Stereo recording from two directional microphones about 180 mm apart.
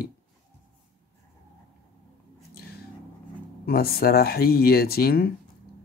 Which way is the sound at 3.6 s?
60° left (ahead or behind).